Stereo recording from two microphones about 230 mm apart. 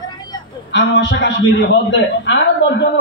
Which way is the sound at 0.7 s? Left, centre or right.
Left.